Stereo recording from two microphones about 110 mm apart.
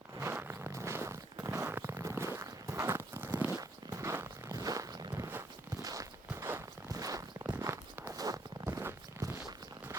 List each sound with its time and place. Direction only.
0.2 s zipper: 20° right (ahead or behind)
3.5 s walk: 35° right (ahead or behind)
4.5 s walk: 30° right (ahead or behind)
6.3 s a sound: 20° right (ahead or behind)
6.8 s zipper: 35° right (ahead or behind)
8.1 s walk: 35° right (ahead or behind)